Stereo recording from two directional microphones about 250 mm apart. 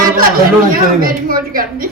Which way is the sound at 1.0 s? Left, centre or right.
Right.